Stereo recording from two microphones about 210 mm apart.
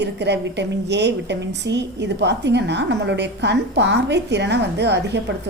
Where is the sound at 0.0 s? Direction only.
55° right (ahead or behind).